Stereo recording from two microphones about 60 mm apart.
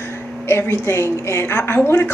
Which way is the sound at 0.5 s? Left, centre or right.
Left.